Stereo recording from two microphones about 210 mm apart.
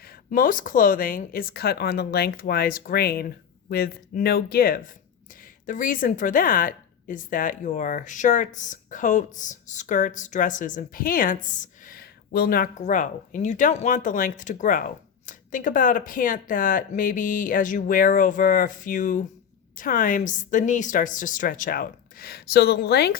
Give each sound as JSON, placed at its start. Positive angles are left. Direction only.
{"t": 0.0, "sound": "a woman's voice", "side_deg": 45}